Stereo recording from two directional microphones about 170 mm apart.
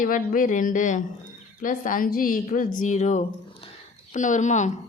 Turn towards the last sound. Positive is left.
turn(degrees=45)  # may be behind; listen again after turning